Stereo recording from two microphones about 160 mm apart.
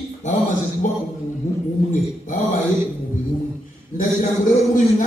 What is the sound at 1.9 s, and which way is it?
Speech, 55° left (ahead or behind).